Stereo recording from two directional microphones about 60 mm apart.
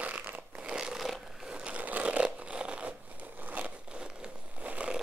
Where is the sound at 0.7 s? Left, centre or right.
Centre.